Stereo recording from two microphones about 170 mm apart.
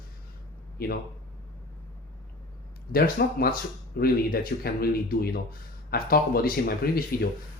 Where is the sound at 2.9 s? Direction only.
60° left (ahead or behind).